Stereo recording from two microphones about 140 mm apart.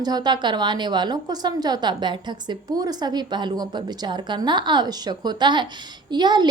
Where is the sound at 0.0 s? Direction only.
30° right (ahead or behind).